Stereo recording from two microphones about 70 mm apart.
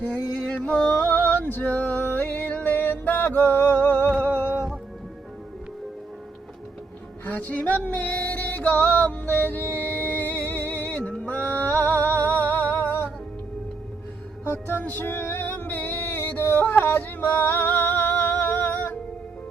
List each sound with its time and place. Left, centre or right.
0.0 s a sound: centre
4.5 s music: centre
7.3 s music: left
14.4 s music: left